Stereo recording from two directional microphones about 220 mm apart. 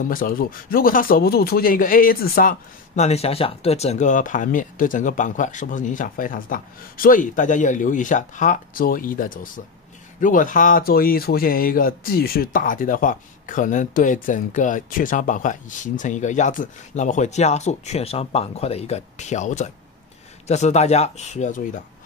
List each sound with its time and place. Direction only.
0.1 s speech: 40° left (ahead or behind)
3.0 s speech: 30° left (ahead or behind)